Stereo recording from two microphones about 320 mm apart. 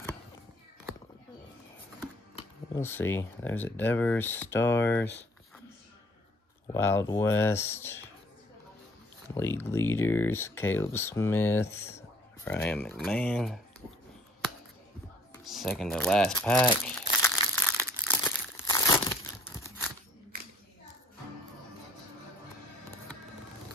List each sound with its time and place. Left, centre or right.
2.3 s speech: centre
6.7 s speech: centre
9.3 s speech: centre
15.3 s crumpling: centre